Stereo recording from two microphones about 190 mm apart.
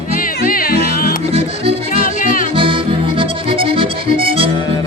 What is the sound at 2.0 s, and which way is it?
Music, 45° left (ahead or behind).